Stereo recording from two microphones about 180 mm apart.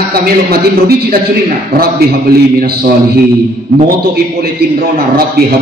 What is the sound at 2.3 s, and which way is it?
Speech, 55° right (ahead or behind).